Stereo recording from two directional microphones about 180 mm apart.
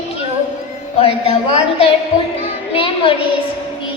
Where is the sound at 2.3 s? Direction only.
35° left (ahead or behind).